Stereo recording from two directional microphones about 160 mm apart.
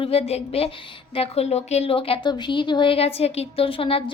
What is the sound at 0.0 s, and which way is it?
A woman's voice, 40° left (ahead or behind).